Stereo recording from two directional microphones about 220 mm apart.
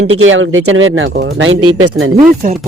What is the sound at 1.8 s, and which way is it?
Speech, 70° right (ahead or behind).